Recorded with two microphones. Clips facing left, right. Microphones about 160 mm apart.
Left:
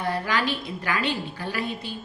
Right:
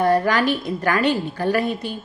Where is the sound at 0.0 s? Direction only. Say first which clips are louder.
Right 8 dB; 45° right (ahead or behind).